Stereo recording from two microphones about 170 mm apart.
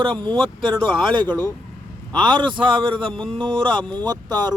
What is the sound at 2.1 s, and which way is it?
Speech, 25° right (ahead or behind).